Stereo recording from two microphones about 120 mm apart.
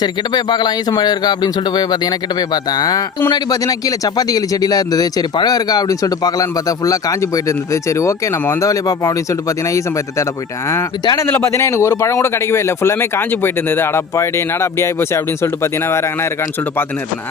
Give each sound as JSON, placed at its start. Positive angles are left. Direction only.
{"t": 0.0, "sound": "a man's voice", "side_deg": 35}
{"t": 11.3, "sound": "speech", "side_deg": 20}